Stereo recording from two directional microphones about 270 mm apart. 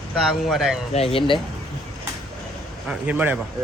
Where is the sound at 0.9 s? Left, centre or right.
Left.